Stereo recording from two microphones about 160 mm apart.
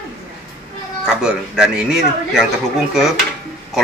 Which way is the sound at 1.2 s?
5° right (ahead or behind).